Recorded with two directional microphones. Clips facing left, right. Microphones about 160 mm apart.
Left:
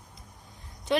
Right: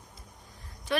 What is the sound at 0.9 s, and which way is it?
Speech, 25° left (ahead or behind).